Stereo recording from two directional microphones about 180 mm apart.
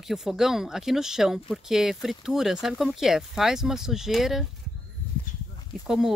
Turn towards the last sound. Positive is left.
turn(degrees=0)  # may be behind; listen again after turning